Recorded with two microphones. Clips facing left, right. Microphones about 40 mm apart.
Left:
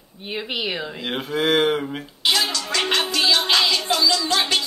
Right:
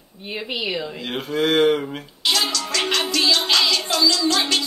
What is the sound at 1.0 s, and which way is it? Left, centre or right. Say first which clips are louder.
Speech: even; left.